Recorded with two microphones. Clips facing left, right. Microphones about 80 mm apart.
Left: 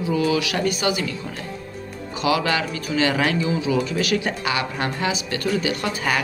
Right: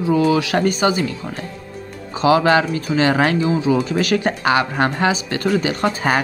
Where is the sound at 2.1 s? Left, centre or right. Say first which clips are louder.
Right 7 dB; right.